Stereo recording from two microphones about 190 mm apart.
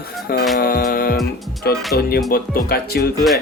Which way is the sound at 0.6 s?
50° left (ahead or behind).